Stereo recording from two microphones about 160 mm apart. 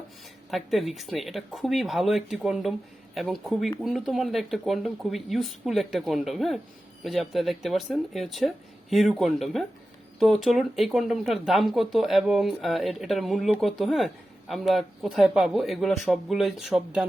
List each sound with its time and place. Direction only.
0.5 s speech: centre (ahead or behind)